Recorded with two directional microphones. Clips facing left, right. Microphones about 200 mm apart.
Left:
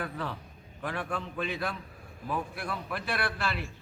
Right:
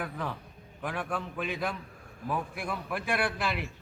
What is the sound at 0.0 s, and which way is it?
A man's voice, 10° right (ahead or behind).